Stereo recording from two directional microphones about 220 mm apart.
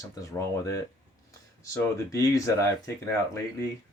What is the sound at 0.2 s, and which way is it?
Speech, 15° left (ahead or behind).